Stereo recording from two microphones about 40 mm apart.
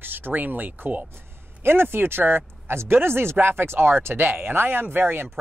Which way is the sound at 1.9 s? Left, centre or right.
Right.